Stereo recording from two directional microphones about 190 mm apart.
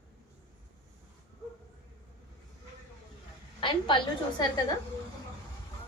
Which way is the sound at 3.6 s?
25° left (ahead or behind).